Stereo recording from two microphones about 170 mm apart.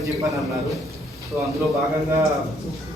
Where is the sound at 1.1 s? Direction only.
15° right (ahead or behind).